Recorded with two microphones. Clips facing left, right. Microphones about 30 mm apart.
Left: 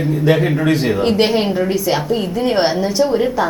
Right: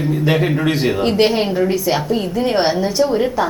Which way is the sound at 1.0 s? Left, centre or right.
Centre.